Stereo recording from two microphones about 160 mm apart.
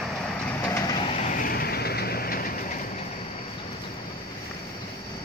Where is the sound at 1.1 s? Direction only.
45° left (ahead or behind).